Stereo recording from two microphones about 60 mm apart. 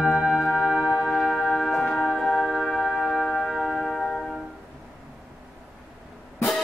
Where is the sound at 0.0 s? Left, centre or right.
Centre.